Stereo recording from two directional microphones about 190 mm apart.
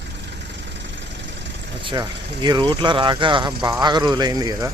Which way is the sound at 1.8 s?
25° right (ahead or behind).